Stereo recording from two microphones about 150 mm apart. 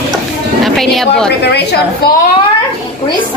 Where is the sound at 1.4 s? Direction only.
90° left.